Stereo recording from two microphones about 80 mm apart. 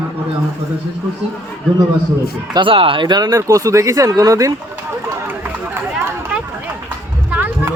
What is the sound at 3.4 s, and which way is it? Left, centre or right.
Speech, right.